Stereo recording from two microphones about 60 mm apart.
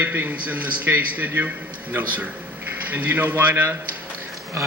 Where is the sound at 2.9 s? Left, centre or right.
Right.